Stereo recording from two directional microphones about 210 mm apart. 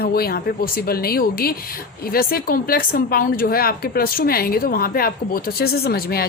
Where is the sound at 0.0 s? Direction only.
45° left (ahead or behind).